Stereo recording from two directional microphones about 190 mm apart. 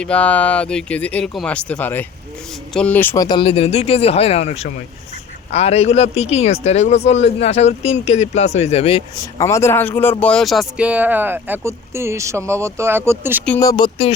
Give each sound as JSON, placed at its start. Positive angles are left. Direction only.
{"t": 0.0, "sound": "speech", "side_deg": 5}
{"t": 3.2, "sound": "speech", "side_deg": 30}
{"t": 9.4, "sound": "speech", "side_deg": 15}
{"t": 13.6, "sound": "speech", "side_deg": 20}